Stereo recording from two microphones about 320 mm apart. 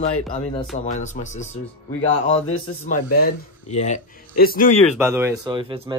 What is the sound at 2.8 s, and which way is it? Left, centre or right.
Speech, left.